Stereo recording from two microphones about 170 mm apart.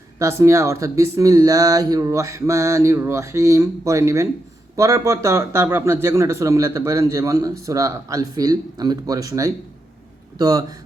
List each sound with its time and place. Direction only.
0.2 s a man's voice: 15° right (ahead or behind)